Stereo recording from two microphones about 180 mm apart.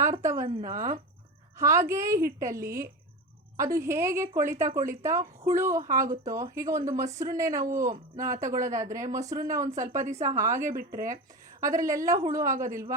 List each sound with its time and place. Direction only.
0.2 s a woman's voice: 15° right (ahead or behind)
1.5 s speech: 15° right (ahead or behind)